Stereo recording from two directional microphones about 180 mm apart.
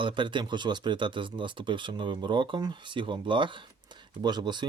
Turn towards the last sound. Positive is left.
turn(degrees=-25)  # may be behind; listen again after turning